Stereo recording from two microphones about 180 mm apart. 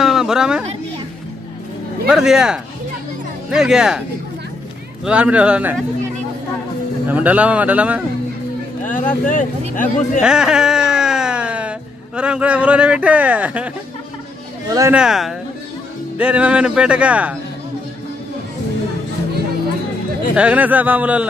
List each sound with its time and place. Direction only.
0.0 s a sound: centre (ahead or behind)
2.0 s speech: 5° right (ahead or behind)
5.0 s speech: 5° right (ahead or behind)
7.1 s speech: 10° right (ahead or behind)
8.8 s speech: 45° left (ahead or behind)
10.2 s a sound: 5° right (ahead or behind)
12.2 s speech: 5° right (ahead or behind)
14.7 s speech: 15° right (ahead or behind)
15.0 s speech: centre (ahead or behind)
20.3 s speech: 10° right (ahead or behind)